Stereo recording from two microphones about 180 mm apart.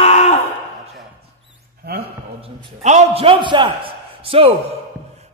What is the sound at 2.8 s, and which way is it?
A man's voice, 35° right (ahead or behind).